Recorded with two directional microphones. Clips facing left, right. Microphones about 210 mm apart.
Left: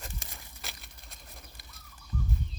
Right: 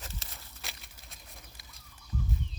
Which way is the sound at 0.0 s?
15° left (ahead or behind).